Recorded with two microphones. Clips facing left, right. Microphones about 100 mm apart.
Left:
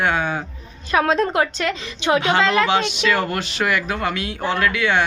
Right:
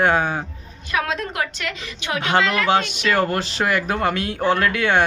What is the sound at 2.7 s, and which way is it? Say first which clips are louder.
Speech: even; 45° right (ahead or behind).